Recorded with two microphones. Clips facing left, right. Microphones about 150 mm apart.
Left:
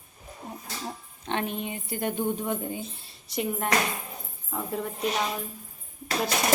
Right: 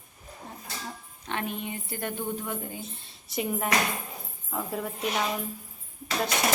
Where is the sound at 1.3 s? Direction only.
25° left (ahead or behind).